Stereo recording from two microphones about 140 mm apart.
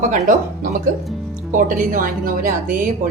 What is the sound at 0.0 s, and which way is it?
A woman's voice, 70° right (ahead or behind).